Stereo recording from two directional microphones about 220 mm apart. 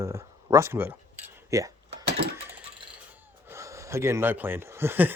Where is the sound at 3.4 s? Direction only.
15° right (ahead or behind).